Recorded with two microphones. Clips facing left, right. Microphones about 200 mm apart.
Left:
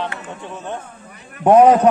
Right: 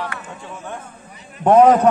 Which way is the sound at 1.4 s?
10° left (ahead or behind).